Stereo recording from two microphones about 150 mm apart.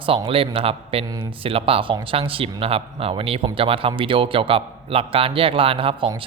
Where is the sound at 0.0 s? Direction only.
35° right (ahead or behind).